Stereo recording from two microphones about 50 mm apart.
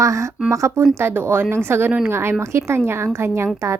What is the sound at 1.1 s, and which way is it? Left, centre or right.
A woman's voice, right.